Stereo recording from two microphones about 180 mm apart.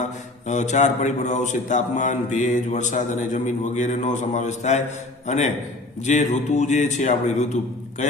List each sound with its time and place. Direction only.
0.4 s a man's voice: 40° left (ahead or behind)